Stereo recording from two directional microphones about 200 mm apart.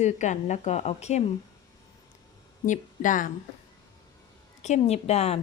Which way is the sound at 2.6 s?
40° left (ahead or behind).